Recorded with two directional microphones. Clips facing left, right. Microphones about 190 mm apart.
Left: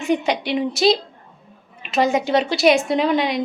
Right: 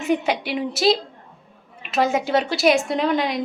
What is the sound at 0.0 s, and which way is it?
A woman's voice, 5° right (ahead or behind).